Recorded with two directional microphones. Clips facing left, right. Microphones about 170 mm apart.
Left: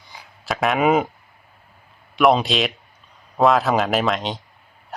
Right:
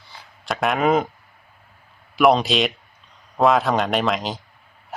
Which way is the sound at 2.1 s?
Centre (ahead or behind).